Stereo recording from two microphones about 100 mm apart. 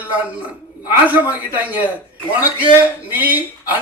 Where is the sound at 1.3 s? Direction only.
15° right (ahead or behind).